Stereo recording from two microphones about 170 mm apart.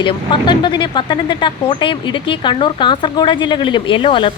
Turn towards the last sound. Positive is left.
turn(degrees=30)  # may be behind; listen again after turning